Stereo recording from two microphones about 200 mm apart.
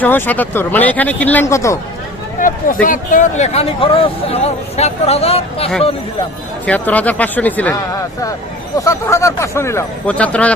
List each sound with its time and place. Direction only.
0.0 s speech: 10° left (ahead or behind)
2.4 s a sound: 40° left (ahead or behind)
2.8 s speech: 40° left (ahead or behind)
6.7 s speech: 10° left (ahead or behind)
8.8 s speech: 15° left (ahead or behind)